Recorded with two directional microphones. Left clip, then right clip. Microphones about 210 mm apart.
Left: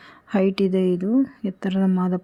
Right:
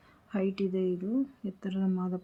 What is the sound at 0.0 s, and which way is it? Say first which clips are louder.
A woman's voice: left 11 dB; 45° left (ahead or behind).